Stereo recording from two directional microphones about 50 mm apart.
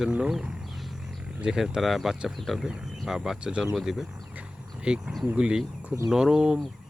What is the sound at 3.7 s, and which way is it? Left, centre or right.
Speech, centre.